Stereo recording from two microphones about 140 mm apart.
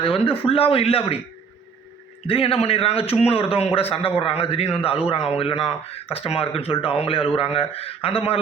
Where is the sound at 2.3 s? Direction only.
40° left (ahead or behind).